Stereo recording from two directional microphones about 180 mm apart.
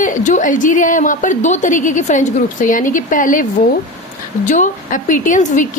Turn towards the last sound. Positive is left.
turn(degrees=45)  # may be behind; listen again after turning